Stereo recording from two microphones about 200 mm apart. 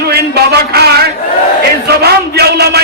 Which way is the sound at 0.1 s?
55° right (ahead or behind).